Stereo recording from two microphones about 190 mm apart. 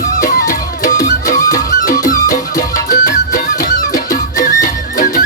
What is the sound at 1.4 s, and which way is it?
Music, 20° left (ahead or behind).